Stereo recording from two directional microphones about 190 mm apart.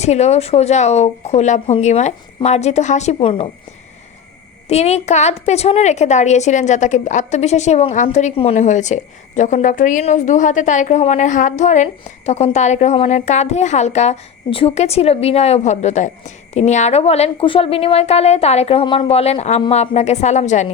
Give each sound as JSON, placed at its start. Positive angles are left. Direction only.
{"t": 0.0, "sound": "a woman's voice", "side_deg": 35}
{"t": 4.7, "sound": "a woman's voice", "side_deg": 35}